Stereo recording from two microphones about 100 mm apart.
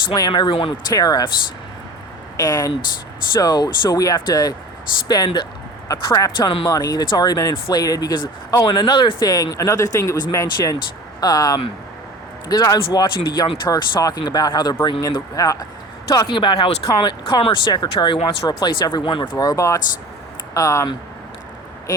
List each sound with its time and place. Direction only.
0.1 s speech: 45° left (ahead or behind)
0.9 s speech: 40° left (ahead or behind)
2.4 s speech: 40° left (ahead or behind)
16.3 s speech: 55° left (ahead or behind)
17.0 s speech: 50° left (ahead or behind)
17.8 s speech: 60° left (ahead or behind)
18.4 s speech: 50° left (ahead or behind); by 20.8 s 30° left (ahead or behind)